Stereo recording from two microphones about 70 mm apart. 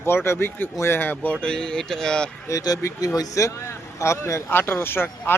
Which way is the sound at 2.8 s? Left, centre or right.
Left.